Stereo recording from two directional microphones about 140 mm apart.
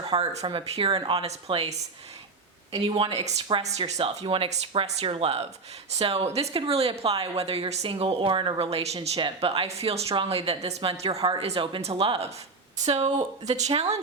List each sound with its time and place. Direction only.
0.0 s speech: 45° right (ahead or behind)
12.8 s speech: 50° right (ahead or behind)